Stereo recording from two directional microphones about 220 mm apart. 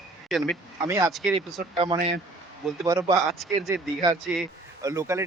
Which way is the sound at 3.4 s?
Centre (ahead or behind).